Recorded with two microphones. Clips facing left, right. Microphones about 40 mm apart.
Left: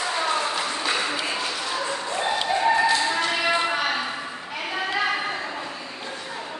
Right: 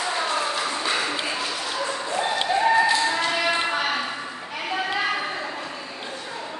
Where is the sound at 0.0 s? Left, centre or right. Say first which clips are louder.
Even; centre.